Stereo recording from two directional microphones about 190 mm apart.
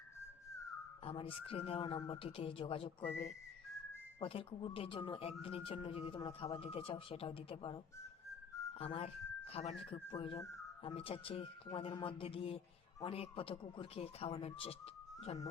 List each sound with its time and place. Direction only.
1.0 s speech: 30° left (ahead or behind)
3.0 s speech: 10° left (ahead or behind)
4.2 s speech: 30° left (ahead or behind)
8.8 s speech: 30° left (ahead or behind)